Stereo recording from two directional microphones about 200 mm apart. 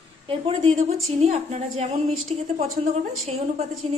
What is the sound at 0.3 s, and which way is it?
A woman's voice, 30° right (ahead or behind).